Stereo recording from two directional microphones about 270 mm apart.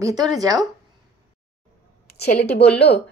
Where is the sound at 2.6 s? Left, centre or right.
Left.